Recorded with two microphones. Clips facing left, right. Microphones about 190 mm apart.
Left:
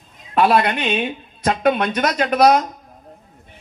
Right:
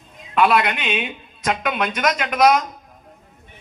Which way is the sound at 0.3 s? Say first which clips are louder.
Left 2 dB; 35° left (ahead or behind).